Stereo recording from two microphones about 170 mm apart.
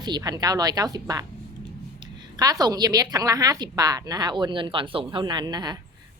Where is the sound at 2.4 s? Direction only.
20° right (ahead or behind).